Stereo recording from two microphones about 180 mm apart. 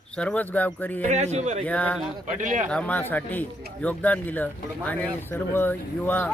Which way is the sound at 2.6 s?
5° left (ahead or behind).